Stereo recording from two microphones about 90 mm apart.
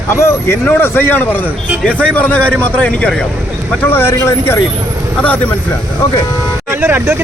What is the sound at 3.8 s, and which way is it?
Speech, 25° left (ahead or behind).